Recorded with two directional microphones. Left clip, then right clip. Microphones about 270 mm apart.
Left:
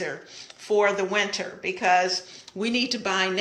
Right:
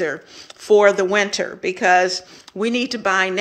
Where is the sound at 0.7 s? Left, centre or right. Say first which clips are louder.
Right 9 dB; right.